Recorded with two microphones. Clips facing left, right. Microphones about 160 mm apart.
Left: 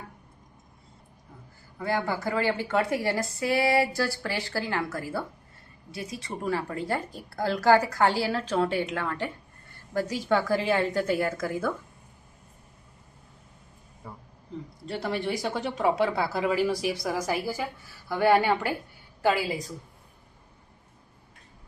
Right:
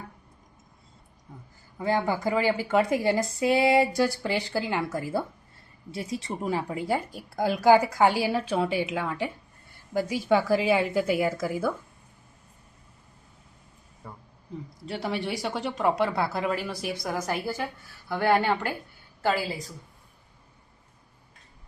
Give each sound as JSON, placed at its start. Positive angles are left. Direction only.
{"t": 1.8, "sound": "a woman's voice", "side_deg": -15}
{"t": 14.0, "sound": "a sound", "side_deg": 5}
{"t": 14.8, "sound": "speech", "side_deg": 0}